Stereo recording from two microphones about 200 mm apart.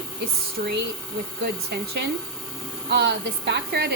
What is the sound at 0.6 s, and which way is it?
Speech, 45° right (ahead or behind).